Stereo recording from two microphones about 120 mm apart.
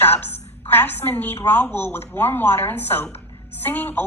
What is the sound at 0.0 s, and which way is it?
Music, 15° left (ahead or behind).